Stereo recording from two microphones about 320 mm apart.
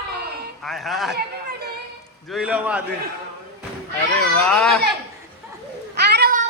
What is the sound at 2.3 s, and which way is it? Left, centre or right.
Speech, centre.